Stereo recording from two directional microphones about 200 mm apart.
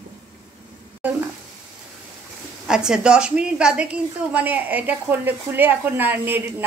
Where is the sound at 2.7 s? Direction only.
5° right (ahead or behind).